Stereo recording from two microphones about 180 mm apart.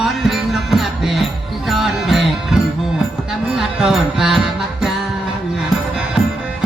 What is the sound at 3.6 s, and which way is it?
Music, centre (ahead or behind).